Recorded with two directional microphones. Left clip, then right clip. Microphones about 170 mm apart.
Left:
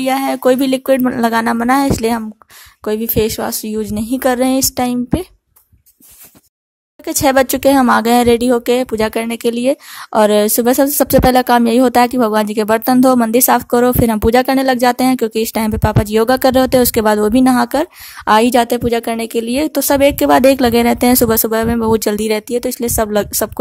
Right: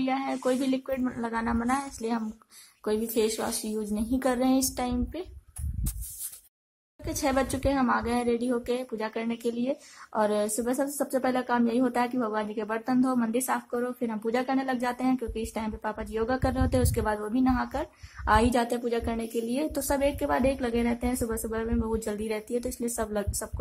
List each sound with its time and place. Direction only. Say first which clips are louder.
0.0 s a woman's voice: left 15 dB; 65° left (ahead or behind)
7.1 s speech: left 15 dB; 55° left (ahead or behind)